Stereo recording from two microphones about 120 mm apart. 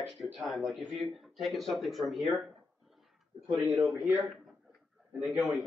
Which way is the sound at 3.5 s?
15° right (ahead or behind).